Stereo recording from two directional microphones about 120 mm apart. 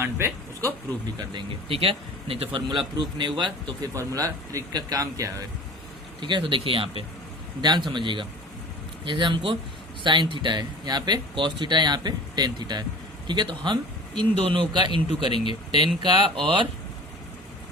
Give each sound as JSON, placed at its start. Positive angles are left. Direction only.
{"t": 0.0, "sound": "speech", "side_deg": -20}
{"t": 1.0, "sound": "speech", "side_deg": -45}
{"t": 2.6, "sound": "speech", "side_deg": -40}
{"t": 3.9, "sound": "speech", "side_deg": -30}
{"t": 6.1, "sound": "speech", "side_deg": -40}